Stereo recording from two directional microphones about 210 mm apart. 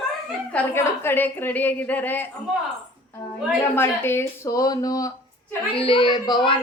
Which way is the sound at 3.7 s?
10° left (ahead or behind).